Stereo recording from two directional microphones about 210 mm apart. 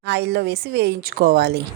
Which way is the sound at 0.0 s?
55° right (ahead or behind).